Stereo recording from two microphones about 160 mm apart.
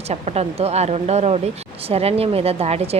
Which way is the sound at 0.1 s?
40° right (ahead or behind).